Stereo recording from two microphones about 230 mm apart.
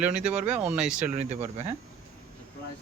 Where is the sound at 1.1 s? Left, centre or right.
Right.